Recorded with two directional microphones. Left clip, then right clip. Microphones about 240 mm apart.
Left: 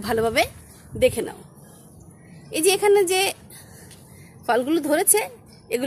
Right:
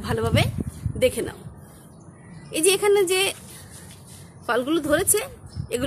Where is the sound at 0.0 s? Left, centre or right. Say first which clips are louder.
Left 3 dB; left.